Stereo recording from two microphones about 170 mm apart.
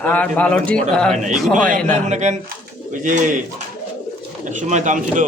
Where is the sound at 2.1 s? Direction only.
45° right (ahead or behind).